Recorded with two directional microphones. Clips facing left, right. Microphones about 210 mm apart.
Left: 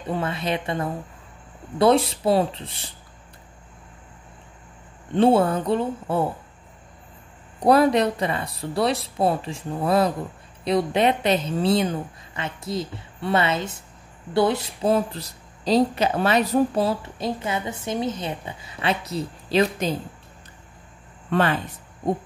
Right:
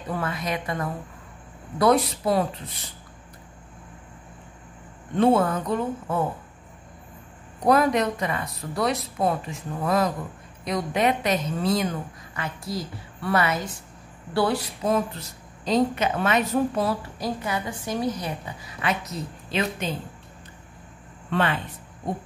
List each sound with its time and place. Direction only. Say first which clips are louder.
0.1 s speech: left 3 dB; 25° left (ahead or behind)
5.1 s speech: left 2 dB; 30° left (ahead or behind)
7.6 s speech: left 3 dB; 30° left (ahead or behind)
21.3 s speech: left 3 dB; 40° left (ahead or behind)